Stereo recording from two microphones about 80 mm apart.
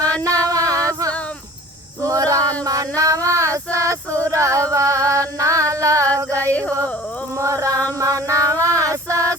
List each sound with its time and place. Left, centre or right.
0.2 s music: right
0.9 s male singing: right
2.0 s female singing: right
6.1 s singing: right
6.5 s speech: centre
7.3 s a sound: right
8.8 s female singing: right